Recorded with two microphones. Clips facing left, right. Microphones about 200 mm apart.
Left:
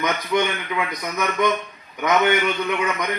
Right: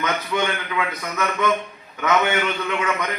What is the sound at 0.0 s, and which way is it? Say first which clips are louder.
Speech: left 2 dB; 15° left (ahead or behind).